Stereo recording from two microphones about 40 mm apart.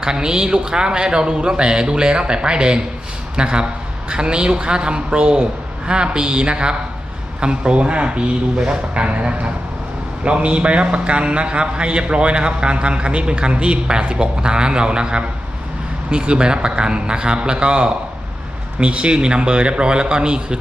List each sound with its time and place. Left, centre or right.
0.0 s a man's voice: centre
10.2 s a man's voice: right